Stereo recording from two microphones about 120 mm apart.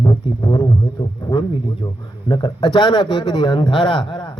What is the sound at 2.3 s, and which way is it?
A man's voice, 40° left (ahead or behind).